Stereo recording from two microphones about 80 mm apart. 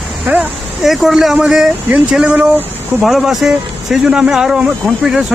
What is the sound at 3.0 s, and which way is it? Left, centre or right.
Speech, centre.